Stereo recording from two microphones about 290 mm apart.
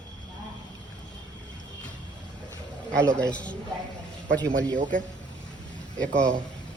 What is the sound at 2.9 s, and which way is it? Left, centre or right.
Speech, centre.